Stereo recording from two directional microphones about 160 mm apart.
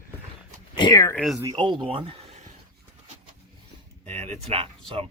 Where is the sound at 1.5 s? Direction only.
30° right (ahead or behind).